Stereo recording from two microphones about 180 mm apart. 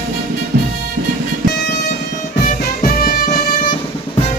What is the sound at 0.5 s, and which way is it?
Music, 60° right (ahead or behind).